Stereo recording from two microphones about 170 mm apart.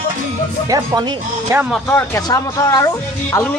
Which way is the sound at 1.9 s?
15° left (ahead or behind).